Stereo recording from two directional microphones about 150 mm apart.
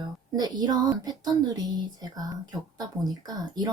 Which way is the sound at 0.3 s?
25° right (ahead or behind).